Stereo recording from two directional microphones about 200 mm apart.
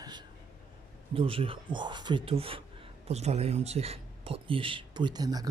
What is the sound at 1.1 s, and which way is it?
Speech, 25° right (ahead or behind).